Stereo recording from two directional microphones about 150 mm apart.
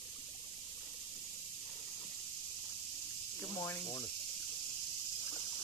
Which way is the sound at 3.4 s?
15° left (ahead or behind).